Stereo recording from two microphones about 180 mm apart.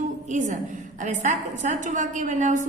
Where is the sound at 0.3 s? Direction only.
45° right (ahead or behind).